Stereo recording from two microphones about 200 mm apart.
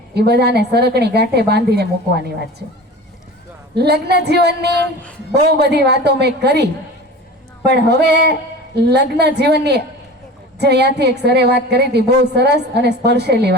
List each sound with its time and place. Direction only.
0.1 s a woman's voice: 55° right (ahead or behind)
3.8 s a woman's voice: 55° right (ahead or behind)